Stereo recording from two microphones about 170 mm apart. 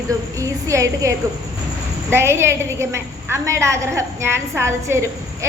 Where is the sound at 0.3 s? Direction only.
20° right (ahead or behind).